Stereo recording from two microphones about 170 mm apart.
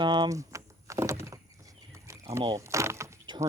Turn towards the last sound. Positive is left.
turn(degrees=-15)  # may be behind; listen again after turning